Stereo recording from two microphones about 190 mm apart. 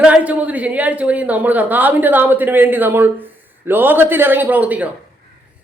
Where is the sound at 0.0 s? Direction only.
5° right (ahead or behind).